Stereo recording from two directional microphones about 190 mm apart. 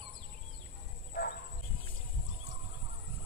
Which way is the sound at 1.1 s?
50° left (ahead or behind).